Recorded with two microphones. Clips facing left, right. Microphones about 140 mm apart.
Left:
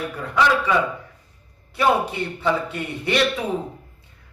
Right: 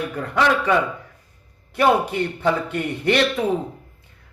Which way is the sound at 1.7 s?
55° right (ahead or behind).